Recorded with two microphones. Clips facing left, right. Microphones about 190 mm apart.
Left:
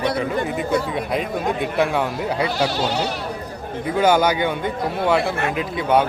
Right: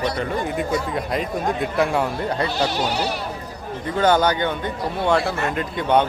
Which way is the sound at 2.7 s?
15° right (ahead or behind).